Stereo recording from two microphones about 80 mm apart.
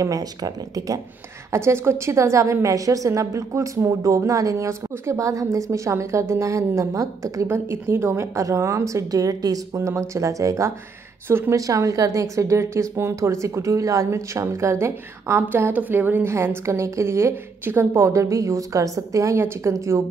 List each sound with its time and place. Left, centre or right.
0.0 s a woman's voice: right
1.5 s a woman's voice: right
7.4 s a woman's voice: right
9.8 s a woman's voice: right
11.2 s speech: right
11.5 s a woman's voice: right
15.5 s a woman's voice: right